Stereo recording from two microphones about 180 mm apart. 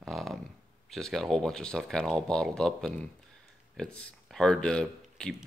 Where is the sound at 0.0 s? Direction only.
Centre (ahead or behind).